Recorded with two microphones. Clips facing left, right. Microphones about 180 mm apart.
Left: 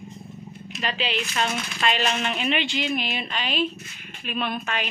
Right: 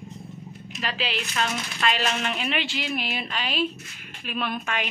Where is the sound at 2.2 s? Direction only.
5° right (ahead or behind).